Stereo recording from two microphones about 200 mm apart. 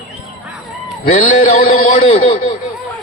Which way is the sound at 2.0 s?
30° left (ahead or behind).